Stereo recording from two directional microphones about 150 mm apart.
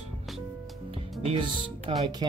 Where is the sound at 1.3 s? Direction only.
40° right (ahead or behind).